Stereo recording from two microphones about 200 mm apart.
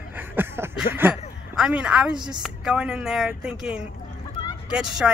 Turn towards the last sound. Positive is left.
turn(degrees=-5)  # may be behind; listen again after turning